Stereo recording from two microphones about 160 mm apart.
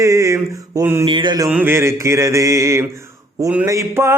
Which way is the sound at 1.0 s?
30° right (ahead or behind).